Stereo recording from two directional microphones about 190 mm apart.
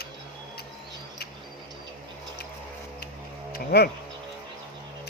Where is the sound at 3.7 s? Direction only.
55° left (ahead or behind).